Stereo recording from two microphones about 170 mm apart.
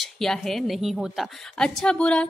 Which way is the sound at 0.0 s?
Centre (ahead or behind).